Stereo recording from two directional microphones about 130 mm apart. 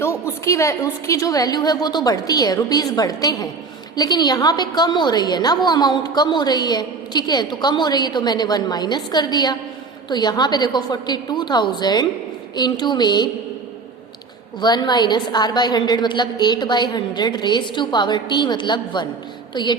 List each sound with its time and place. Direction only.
0.4 s a woman's voice: 25° left (ahead or behind)
14.6 s a woman's voice: 35° left (ahead or behind)